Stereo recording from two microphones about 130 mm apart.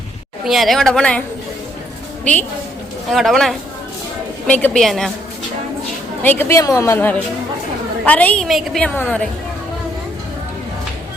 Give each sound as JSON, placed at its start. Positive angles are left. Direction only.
{"t": 0.4, "sound": "a woman's voice", "side_deg": 0}
{"t": 2.3, "sound": "a woman's voice", "side_deg": 10}
{"t": 6.2, "sound": "a woman's voice", "side_deg": 15}
{"t": 8.9, "sound": "a woman's voice", "side_deg": 10}